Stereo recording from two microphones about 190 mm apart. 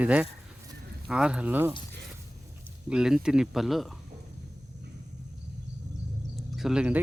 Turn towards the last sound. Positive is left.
turn(degrees=-5)  # may be behind; listen again after turning